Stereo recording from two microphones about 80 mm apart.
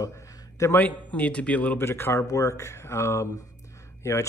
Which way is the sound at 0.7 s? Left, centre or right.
Centre.